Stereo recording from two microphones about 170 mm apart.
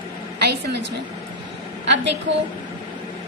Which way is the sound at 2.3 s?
90° right.